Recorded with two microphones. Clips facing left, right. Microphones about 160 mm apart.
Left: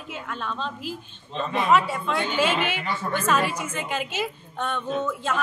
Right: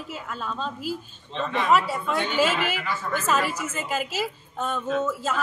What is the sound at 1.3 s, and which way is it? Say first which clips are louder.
Speech: left 1 dB; 10° left (ahead or behind).